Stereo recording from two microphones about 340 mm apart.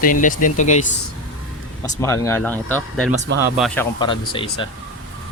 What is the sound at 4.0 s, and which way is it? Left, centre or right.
Speech, centre.